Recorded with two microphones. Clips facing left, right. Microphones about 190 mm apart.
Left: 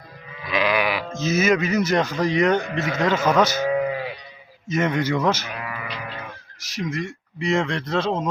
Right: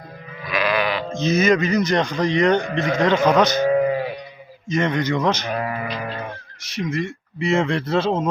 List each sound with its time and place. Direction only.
0.5 s speech: 15° left (ahead or behind)
4.7 s a man's voice: 5° left (ahead or behind)
5.5 s cattle: 45° right (ahead or behind)
6.6 s speech: centre (ahead or behind)